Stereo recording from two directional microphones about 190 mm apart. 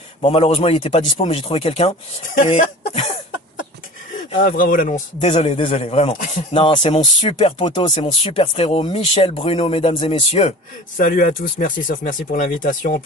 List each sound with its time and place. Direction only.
0.2 s a man's voice: 30° left (ahead or behind)
4.4 s speech: 45° left (ahead or behind)
5.3 s a man's voice: 30° left (ahead or behind)
11.0 s speech: 45° left (ahead or behind)